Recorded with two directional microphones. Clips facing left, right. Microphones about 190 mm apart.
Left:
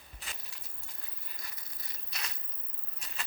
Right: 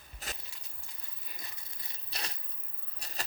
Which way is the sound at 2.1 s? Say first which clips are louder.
Right 3 dB; 30° right (ahead or behind).